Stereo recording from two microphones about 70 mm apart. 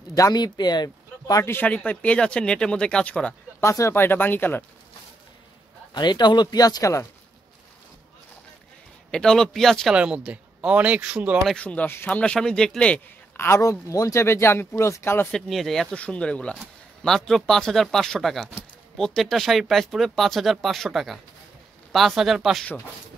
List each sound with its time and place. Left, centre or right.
0.1 s speech: left
1.4 s speech: left
1.7 s speech: centre
3.6 s speech: left
3.9 s speech: left
5.9 s speech: left
9.1 s speech: centre
9.9 s speech: centre
11.5 s speech: centre
13.6 s speech: left
15.3 s speech: centre
15.9 s speech: centre